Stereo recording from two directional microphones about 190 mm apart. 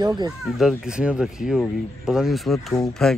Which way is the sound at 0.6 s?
5° right (ahead or behind).